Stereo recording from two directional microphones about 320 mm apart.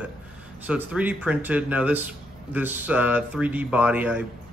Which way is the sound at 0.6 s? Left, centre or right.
Centre.